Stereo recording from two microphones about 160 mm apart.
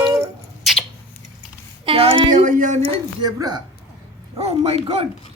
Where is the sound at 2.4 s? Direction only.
55° right (ahead or behind).